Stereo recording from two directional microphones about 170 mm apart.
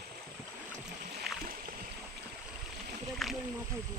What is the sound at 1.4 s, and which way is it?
Rowboat, 55° right (ahead or behind).